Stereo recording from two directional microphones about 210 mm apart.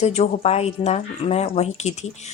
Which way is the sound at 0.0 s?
30° left (ahead or behind).